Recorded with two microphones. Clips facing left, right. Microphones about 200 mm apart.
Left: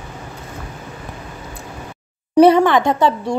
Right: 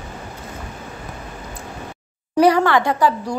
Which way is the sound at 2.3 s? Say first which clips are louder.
Left 4 dB; 20° left (ahead or behind).